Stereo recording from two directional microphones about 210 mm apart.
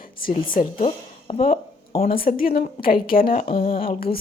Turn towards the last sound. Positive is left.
turn(degrees=45)  # may be behind; listen again after turning